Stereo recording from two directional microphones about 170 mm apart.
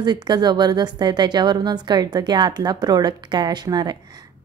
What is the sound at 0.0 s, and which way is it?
A woman's voice, 25° right (ahead or behind).